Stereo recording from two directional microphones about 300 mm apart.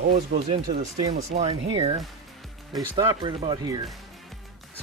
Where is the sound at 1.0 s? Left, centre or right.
Centre.